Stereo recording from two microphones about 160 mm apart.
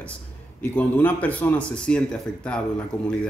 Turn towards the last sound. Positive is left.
turn(degrees=5)  # may be behind; listen again after turning